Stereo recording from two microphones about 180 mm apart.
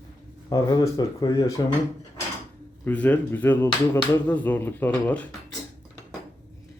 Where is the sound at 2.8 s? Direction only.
10° left (ahead or behind).